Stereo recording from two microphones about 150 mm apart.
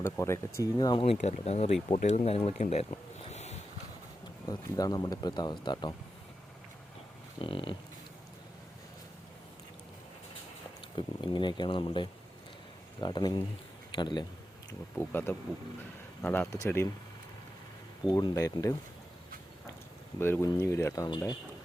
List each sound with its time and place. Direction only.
0.0 s speech: 20° left (ahead or behind)
0.8 s speech: 35° left (ahead or behind)
1.2 s speech: 50° left (ahead or behind)
2.9 s a sound: 45° left (ahead or behind)
4.4 s speech: 25° left (ahead or behind)
7.3 s speech: 35° left (ahead or behind)
10.9 s speech: 30° left (ahead or behind)
14.9 s speech: 15° left (ahead or behind)
18.1 s speech: 25° left (ahead or behind)
20.1 s speech: 15° left (ahead or behind)